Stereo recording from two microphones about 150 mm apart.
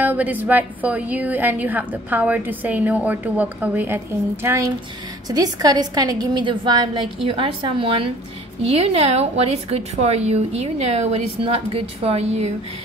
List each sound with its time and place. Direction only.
0.0 s a woman's voice: 10° right (ahead or behind); by 12.5 s 45° right (ahead or behind)